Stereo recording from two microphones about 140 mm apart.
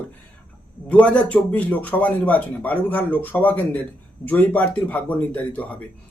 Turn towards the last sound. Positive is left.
turn(degrees=10)  # may be behind; listen again after turning